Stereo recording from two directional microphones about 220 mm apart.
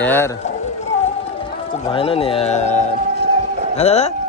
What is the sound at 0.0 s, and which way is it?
Speech, 10° left (ahead or behind).